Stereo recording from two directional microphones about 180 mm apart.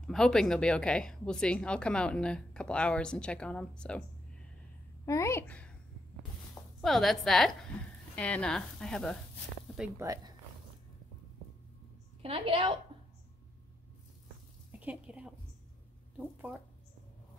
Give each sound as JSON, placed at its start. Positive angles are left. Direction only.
{"t": 0.0, "sound": "a woman's voice", "side_deg": 5}
{"t": 5.0, "sound": "a woman's voice", "side_deg": 15}
{"t": 6.8, "sound": "a woman's voice", "side_deg": 0}
{"t": 9.8, "sound": "speech", "side_deg": -15}
{"t": 12.2, "sound": "a woman's voice", "side_deg": -30}
{"t": 14.7, "sound": "a sound", "side_deg": -10}